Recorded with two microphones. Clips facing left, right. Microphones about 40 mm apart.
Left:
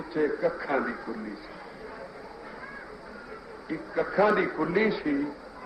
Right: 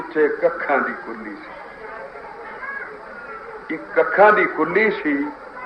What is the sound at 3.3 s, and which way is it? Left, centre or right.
A man's voice, right.